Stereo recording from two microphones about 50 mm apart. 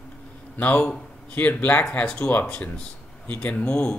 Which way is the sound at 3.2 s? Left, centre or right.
Left.